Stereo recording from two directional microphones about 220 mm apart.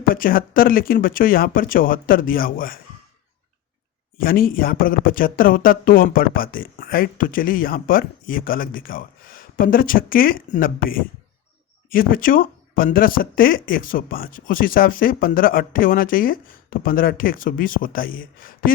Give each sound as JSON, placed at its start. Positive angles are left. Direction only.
{"t": 0.0, "sound": "speech", "side_deg": 40}
{"t": 4.2, "sound": "speech", "side_deg": 40}